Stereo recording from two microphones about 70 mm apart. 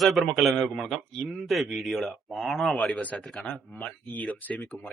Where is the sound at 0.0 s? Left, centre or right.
Centre.